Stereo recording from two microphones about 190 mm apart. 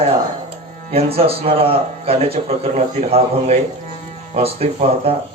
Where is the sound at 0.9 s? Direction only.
30° right (ahead or behind).